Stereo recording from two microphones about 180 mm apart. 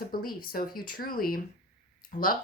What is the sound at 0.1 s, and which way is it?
Speech, 55° left (ahead or behind).